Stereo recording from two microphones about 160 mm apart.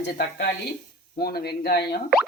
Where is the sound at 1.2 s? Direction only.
80° left.